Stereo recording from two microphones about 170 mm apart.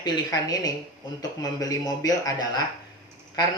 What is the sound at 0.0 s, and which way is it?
Speech, 20° left (ahead or behind).